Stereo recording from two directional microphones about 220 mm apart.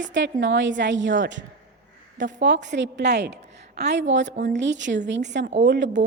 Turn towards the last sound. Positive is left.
turn(degrees=-55)  # may be behind; listen again after turning